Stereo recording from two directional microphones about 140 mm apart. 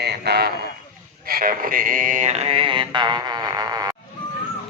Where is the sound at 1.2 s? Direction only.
90° right; by 4.0 s 25° right (ahead or behind).